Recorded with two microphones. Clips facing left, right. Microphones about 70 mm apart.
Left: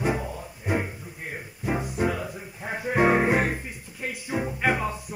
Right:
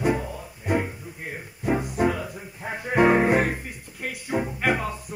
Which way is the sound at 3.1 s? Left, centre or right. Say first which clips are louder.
Right 2 dB; centre.